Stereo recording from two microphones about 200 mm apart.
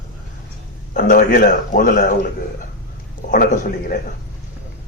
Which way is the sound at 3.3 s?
40° left (ahead or behind).